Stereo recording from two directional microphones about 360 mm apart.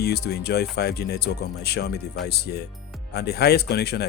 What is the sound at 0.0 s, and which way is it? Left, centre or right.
Speech, left.